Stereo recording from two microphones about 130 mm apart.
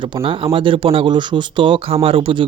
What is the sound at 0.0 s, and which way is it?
Speech, 40° right (ahead or behind).